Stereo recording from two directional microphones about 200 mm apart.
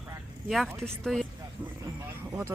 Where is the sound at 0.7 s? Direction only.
5° left (ahead or behind).